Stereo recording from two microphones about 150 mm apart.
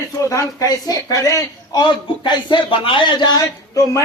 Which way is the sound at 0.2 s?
20° left (ahead or behind).